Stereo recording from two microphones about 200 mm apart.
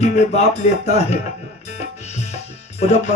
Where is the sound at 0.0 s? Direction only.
35° left (ahead or behind).